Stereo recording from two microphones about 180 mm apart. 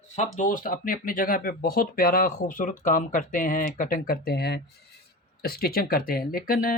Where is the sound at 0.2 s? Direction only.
45° left (ahead or behind).